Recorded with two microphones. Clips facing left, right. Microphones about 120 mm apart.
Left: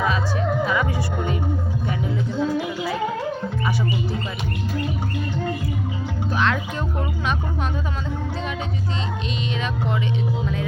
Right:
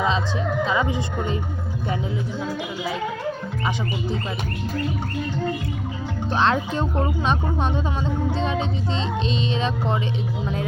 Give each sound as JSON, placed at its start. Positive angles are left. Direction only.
{"t": 0.6, "sound": "music", "side_deg": -25}
{"t": 6.3, "sound": "speech", "side_deg": -30}